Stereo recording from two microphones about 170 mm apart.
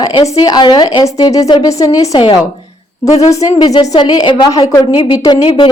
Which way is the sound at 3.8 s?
25° left (ahead or behind).